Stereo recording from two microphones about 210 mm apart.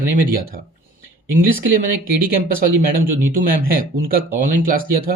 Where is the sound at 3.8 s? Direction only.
45° right (ahead or behind).